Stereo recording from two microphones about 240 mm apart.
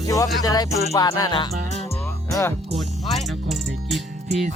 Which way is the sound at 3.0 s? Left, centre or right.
Centre.